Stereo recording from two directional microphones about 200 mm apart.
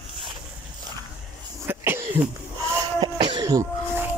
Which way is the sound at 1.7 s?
10° right (ahead or behind).